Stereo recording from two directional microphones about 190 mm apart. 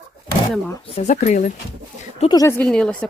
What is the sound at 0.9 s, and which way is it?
Speech, 35° left (ahead or behind).